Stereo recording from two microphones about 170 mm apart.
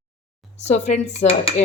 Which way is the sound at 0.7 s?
45° left (ahead or behind).